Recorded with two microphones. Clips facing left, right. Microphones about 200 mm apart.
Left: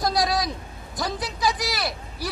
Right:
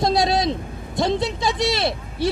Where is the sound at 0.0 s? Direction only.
25° right (ahead or behind).